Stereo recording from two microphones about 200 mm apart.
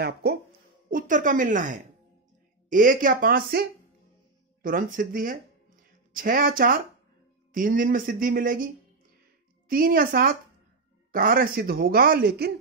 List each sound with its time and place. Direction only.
0.0 s speech: 55° right (ahead or behind)
0.8 s a woman's voice: 40° right (ahead or behind)
9.7 s speech: 45° right (ahead or behind)